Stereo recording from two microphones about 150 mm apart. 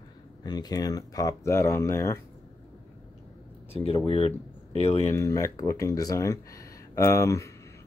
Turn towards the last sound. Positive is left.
turn(degrees=20)  # may be behind; listen again after turning